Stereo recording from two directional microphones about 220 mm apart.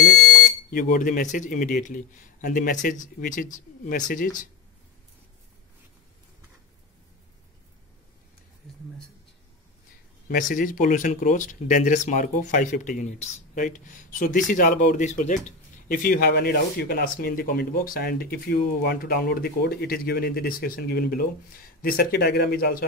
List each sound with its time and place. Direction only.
0.7 s speech: 40° left (ahead or behind)
10.2 s speech: 40° left (ahead or behind)